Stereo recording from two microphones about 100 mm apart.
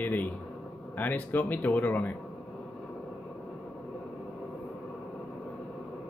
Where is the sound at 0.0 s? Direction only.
15° left (ahead or behind).